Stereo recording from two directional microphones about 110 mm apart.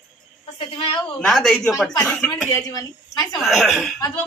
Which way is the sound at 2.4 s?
30° left (ahead or behind).